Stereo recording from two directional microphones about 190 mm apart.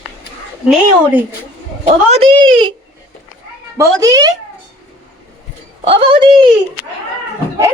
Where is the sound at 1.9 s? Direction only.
35° right (ahead or behind).